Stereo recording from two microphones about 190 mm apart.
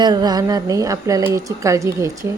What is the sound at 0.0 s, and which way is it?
Speech, 20° right (ahead or behind).